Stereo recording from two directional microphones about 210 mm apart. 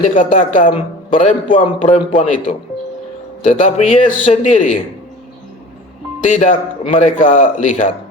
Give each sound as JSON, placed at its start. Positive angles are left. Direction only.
{"t": 0.1, "sound": "a man's voice", "side_deg": 40}
{"t": 0.7, "sound": "a man's voice", "side_deg": 25}
{"t": 6.3, "sound": "a man's voice", "side_deg": 35}